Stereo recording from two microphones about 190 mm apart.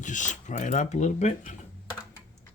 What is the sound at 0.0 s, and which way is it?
Speech, 40° left (ahead or behind).